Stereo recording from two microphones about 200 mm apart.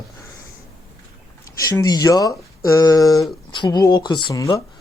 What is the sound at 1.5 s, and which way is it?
Speech, 15° left (ahead or behind).